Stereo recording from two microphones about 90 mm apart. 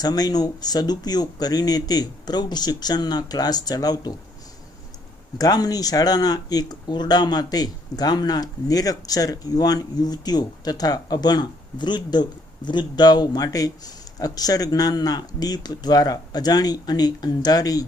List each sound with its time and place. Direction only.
0.0 s speech: 45° left (ahead or behind)
5.4 s speech: 45° left (ahead or behind)